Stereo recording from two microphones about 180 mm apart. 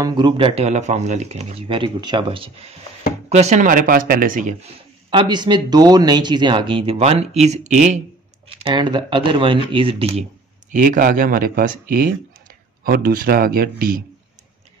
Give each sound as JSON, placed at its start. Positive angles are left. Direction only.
{"t": 0.0, "sound": "speech", "side_deg": -25}
{"t": 5.1, "sound": "speech", "side_deg": -25}
{"t": 8.5, "sound": "speech", "side_deg": -25}
{"t": 10.7, "sound": "speech", "side_deg": -45}